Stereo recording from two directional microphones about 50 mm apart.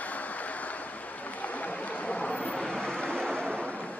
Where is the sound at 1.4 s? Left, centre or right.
Left.